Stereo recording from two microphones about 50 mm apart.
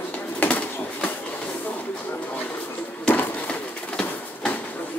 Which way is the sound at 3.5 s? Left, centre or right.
Left.